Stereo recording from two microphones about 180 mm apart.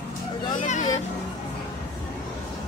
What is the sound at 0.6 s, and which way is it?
Speech, 40° left (ahead or behind).